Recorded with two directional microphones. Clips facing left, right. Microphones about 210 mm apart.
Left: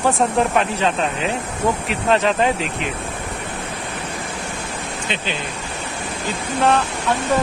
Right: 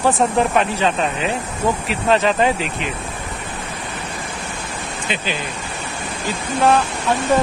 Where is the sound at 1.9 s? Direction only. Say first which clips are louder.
Right 2 dB; centre (ahead or behind).